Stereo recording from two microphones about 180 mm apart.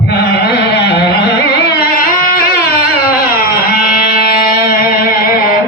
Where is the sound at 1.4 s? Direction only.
55° left (ahead or behind).